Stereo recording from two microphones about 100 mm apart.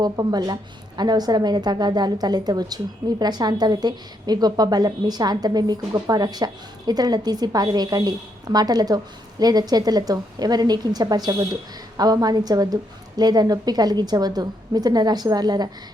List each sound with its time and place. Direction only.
0.0 s a woman's voice: 40° right (ahead or behind)